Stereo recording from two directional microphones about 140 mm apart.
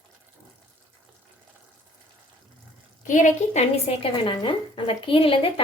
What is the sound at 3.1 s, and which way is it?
A woman's voice, 65° left (ahead or behind).